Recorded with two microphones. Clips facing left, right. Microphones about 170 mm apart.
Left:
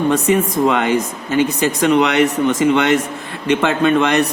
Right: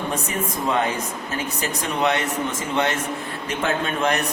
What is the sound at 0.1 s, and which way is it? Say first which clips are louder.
A man's voice: left 11 dB; 75° left (ahead or behind).